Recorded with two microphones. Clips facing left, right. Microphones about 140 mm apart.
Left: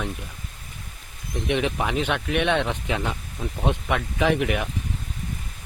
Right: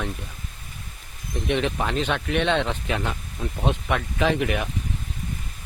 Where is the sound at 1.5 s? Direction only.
10° left (ahead or behind).